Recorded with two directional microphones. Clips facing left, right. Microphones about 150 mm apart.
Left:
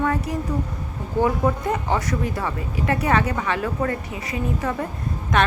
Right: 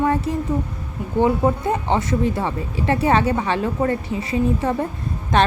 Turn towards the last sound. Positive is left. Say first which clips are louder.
# right 3 dB
turn(degrees=-30)  # may be behind; listen again after turning